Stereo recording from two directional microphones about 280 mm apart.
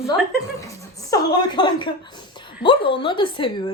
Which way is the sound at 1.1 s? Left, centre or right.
Centre.